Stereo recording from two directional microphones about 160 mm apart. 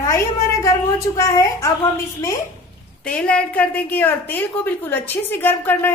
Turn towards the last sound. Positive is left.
turn(degrees=10)  # may be behind; listen again after turning